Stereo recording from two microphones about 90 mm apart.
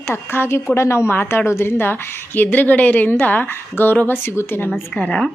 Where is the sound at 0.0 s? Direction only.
25° left (ahead or behind).